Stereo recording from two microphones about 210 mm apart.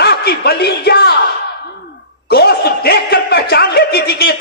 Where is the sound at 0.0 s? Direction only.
45° left (ahead or behind).